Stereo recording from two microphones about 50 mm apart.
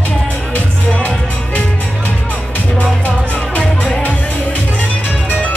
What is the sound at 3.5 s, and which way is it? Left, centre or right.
Music, left.